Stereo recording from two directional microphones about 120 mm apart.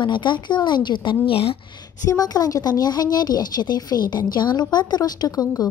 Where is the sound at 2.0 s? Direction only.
30° left (ahead or behind).